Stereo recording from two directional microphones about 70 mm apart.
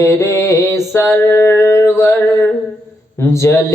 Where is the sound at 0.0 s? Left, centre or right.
Left.